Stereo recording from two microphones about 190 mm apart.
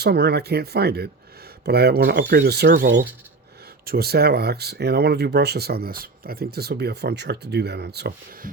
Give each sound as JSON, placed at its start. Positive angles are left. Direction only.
{"t": 0.0, "sound": "speech", "side_deg": -55}